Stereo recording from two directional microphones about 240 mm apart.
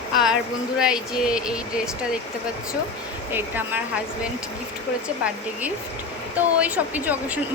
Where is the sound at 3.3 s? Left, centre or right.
Centre.